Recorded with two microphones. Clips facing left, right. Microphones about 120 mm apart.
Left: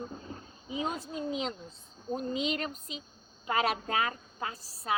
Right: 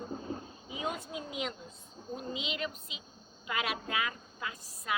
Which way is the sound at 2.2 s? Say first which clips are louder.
Left 5 dB; 40° left (ahead or behind).